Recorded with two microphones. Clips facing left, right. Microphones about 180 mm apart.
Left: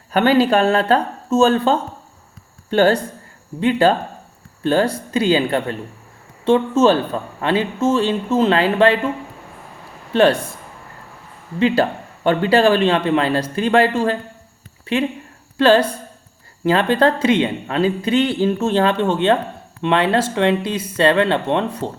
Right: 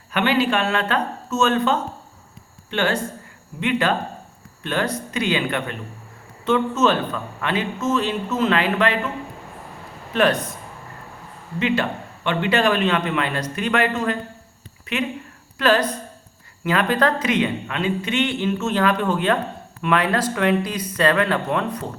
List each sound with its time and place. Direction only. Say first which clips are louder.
0.1 s a man's voice: left 6 dB; 40° left (ahead or behind)
10.1 s speech: left 5 dB; 30° left (ahead or behind)
11.6 s a man's voice: left 5 dB; 35° left (ahead or behind)